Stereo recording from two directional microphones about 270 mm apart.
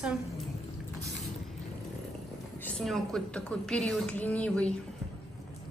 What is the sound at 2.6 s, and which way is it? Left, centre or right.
A woman's voice, centre.